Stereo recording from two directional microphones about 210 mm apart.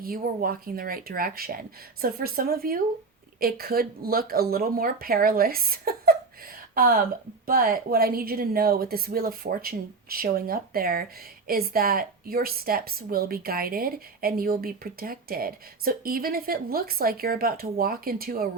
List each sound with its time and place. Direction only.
0.0 s a woman's voice: 45° right (ahead or behind)